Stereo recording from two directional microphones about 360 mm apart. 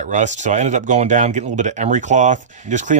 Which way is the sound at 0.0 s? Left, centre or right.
Centre.